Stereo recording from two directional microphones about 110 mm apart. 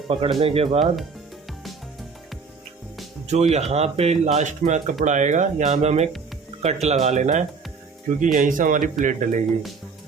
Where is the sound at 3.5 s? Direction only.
75° right (ahead or behind).